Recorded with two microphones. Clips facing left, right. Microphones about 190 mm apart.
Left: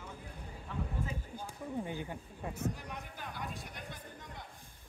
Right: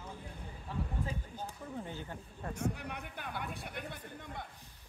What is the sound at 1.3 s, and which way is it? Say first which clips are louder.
Speech: left 3 dB; 15° left (ahead or behind).